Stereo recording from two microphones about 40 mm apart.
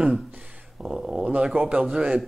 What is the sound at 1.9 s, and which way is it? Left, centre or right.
Music, right.